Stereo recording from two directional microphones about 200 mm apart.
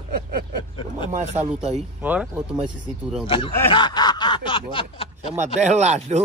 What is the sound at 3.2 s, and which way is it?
Snicker, 25° left (ahead or behind).